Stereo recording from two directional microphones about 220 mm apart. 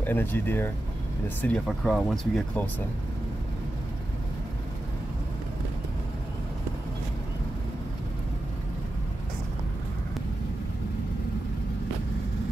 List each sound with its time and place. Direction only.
0.0 s speech: 10° left (ahead or behind)